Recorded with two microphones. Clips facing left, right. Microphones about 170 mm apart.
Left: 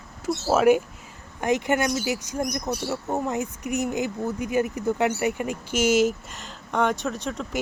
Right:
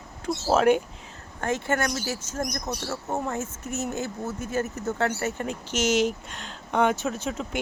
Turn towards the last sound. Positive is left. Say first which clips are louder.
# even
turn(degrees=-5)  # may be behind; listen again after turning